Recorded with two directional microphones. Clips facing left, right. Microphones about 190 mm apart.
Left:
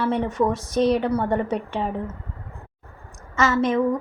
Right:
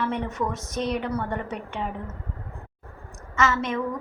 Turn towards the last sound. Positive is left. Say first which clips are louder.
# left 5 dB
turn(degrees=35)  # may be behind; listen again after turning